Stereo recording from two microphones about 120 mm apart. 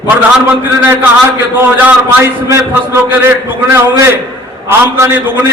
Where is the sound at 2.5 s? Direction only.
20° right (ahead or behind).